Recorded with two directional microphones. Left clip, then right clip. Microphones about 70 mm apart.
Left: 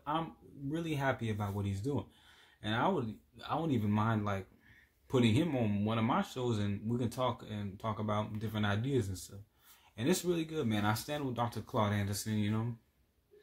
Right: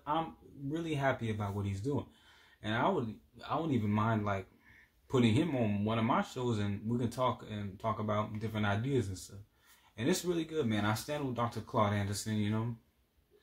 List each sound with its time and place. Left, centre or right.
0.7 s speech: left